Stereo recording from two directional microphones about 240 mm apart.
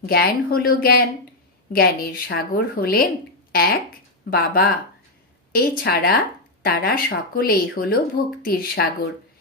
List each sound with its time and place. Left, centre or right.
0.0 s speech: left